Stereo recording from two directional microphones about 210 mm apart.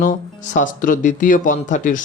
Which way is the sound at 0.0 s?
35° left (ahead or behind).